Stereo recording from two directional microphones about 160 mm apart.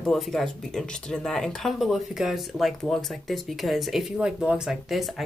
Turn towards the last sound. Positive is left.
turn(degrees=0)  # may be behind; listen again after turning